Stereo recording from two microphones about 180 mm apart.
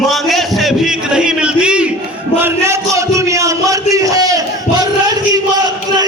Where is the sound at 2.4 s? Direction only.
15° right (ahead or behind).